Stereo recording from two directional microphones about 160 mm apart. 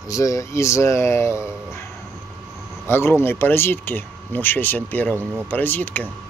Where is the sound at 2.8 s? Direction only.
15° left (ahead or behind).